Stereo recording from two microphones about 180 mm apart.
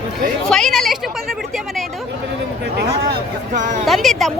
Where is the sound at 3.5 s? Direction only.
45° right (ahead or behind).